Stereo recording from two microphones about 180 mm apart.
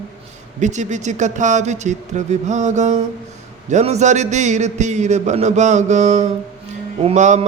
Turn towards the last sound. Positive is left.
turn(degrees=-40)  # may be behind; listen again after turning